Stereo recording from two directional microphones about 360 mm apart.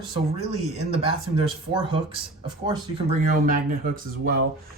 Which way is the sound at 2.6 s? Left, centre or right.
Centre.